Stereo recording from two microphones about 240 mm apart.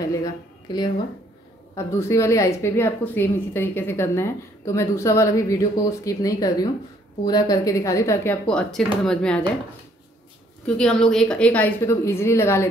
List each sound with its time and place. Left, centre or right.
0.0 s a sound: centre
0.7 s a woman's voice: centre
1.9 s a woman's voice: centre
10.8 s a woman's voice: centre